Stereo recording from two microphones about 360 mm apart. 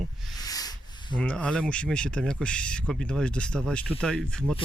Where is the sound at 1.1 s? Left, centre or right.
Centre.